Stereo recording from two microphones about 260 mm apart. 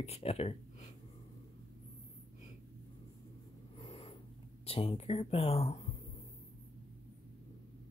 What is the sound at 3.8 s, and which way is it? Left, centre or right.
Dog, left.